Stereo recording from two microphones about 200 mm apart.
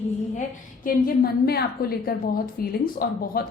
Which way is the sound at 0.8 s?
50° left (ahead or behind).